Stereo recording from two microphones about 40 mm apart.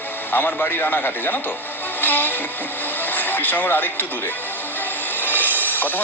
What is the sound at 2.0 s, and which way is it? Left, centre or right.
Vehicle, left.